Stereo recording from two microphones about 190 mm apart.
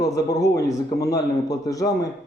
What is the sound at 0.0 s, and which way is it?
Speech, 20° left (ahead or behind).